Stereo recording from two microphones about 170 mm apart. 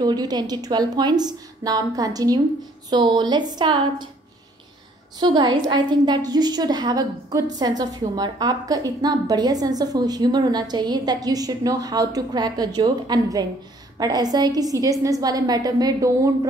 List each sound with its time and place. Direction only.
0.0 s a woman's voice: 25° right (ahead or behind)
5.2 s a woman's voice: 25° right (ahead or behind)